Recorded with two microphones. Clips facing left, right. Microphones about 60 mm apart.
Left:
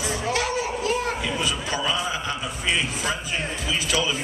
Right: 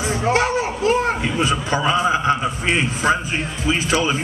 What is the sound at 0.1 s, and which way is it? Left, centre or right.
A man's voice, right.